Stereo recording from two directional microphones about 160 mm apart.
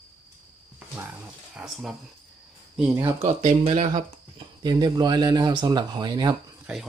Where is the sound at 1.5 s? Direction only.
5° right (ahead or behind).